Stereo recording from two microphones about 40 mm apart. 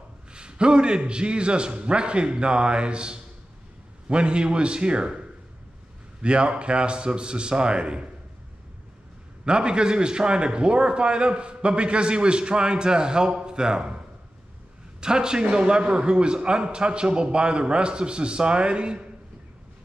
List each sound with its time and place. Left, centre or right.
0.3 s a man's voice: right
6.2 s a man's voice: right
9.4 s a man's voice: right
15.0 s a man's voice: centre